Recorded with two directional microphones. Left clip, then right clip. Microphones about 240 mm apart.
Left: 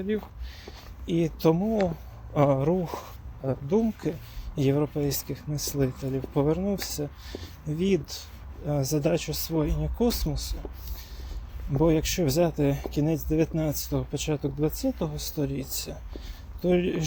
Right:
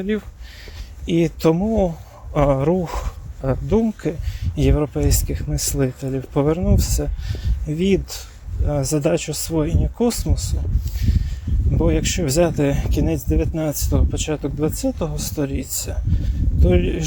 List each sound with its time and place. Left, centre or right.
1.0 s speech: right
11.0 s a sound: right
11.8 s speech: right